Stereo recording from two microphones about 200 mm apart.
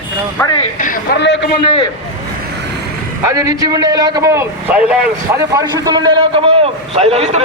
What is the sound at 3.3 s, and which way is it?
A man's voice, 15° right (ahead or behind).